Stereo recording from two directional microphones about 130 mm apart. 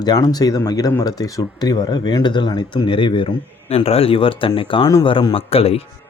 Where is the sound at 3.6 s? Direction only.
55° left (ahead or behind).